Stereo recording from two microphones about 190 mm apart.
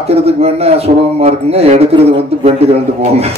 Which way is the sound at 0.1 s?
35° right (ahead or behind).